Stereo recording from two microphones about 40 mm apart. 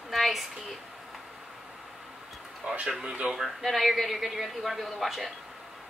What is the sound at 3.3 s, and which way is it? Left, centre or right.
A man's voice, centre.